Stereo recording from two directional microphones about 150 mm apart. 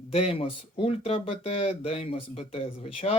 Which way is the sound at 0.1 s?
40° left (ahead or behind).